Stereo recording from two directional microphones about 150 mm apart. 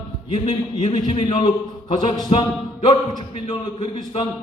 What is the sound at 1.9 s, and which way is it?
A man's voice, 25° left (ahead or behind).